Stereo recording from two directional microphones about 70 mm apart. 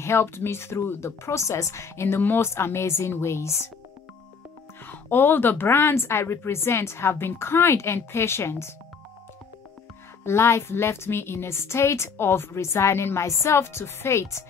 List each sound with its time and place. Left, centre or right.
0.0 s a woman's voice: left
4.8 s a woman's voice: left
10.2 s a woman's voice: left